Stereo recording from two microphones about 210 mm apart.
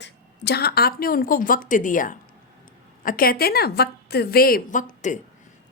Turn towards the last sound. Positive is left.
turn(degrees=35)  # may be behind; listen again after turning